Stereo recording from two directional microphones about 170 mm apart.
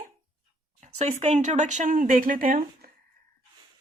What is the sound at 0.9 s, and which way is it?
Speech, 40° right (ahead or behind).